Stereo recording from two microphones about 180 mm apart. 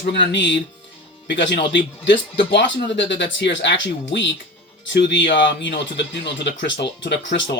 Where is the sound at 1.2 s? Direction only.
75° left (ahead or behind).